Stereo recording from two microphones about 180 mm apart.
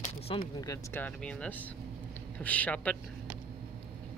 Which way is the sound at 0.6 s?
20° left (ahead or behind).